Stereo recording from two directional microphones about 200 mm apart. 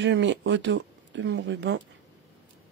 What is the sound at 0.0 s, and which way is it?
Speech, 65° right (ahead or behind).